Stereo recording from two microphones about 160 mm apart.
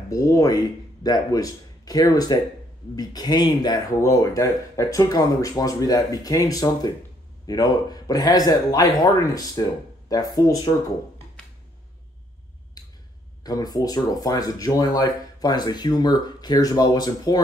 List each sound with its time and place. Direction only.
0.1 s speech: 20° left (ahead or behind)
12.8 s a sound: 25° left (ahead or behind)
13.4 s speech: 25° left (ahead or behind)